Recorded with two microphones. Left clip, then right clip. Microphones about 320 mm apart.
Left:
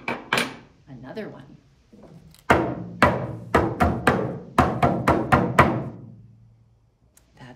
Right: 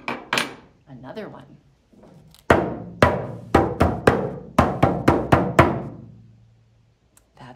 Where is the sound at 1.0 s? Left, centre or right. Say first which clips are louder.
Even; centre.